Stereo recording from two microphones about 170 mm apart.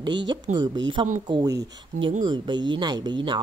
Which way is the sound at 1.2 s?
25° right (ahead or behind).